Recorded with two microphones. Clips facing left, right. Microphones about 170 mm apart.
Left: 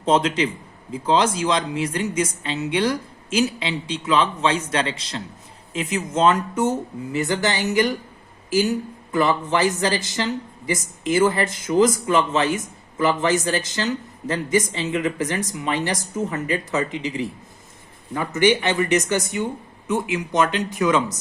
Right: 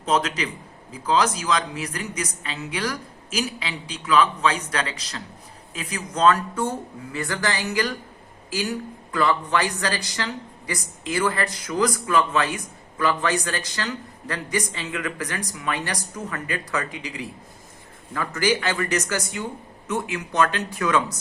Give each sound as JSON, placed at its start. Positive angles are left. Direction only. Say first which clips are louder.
{"t": 0.0, "sound": "a man's voice", "louder": "left 4 dB", "side_deg": 30}
{"t": 9.1, "sound": "a man's voice", "louder": "left 2 dB", "side_deg": 25}
{"t": 18.3, "sound": "a man's voice", "louder": "left 5 dB", "side_deg": 20}